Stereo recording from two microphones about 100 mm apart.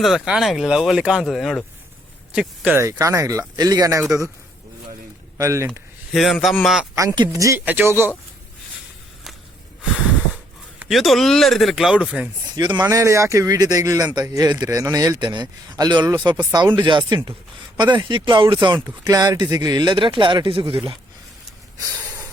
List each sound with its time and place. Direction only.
0.0 s speech: 5° right (ahead or behind)
2.7 s speech: 30° right (ahead or behind)
5.4 s speech: 30° right (ahead or behind)
6.1 s speech: centre (ahead or behind)
7.3 s speech: 30° right (ahead or behind)
7.6 s speech: 15° right (ahead or behind)
10.8 s speech: centre (ahead or behind)
12.5 s speech: 50° right (ahead or behind)
12.9 s speech: 30° right (ahead or behind); by 18.8 s 50° right (ahead or behind)
18.9 s speech: 40° right (ahead or behind); by 20.9 s 60° right (ahead or behind)